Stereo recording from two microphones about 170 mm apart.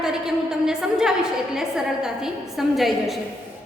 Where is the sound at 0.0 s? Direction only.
5° right (ahead or behind).